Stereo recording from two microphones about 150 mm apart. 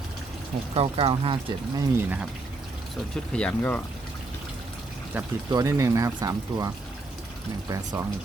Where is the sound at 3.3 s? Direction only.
10° left (ahead or behind).